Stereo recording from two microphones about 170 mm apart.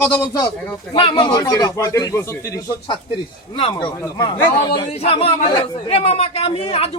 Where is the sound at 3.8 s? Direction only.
25° left (ahead or behind).